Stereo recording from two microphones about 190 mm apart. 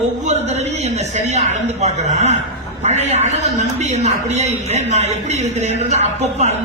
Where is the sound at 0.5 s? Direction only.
35° right (ahead or behind).